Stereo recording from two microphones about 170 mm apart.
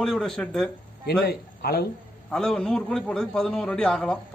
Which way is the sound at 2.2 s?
5° left (ahead or behind).